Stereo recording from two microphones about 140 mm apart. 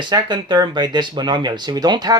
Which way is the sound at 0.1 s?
30° right (ahead or behind).